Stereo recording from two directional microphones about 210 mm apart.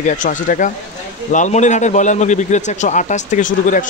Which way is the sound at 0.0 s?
35° left (ahead or behind).